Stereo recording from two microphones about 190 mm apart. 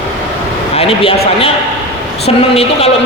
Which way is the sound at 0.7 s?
30° left (ahead or behind).